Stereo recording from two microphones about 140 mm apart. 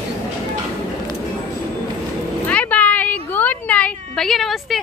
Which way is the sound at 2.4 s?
10° left (ahead or behind).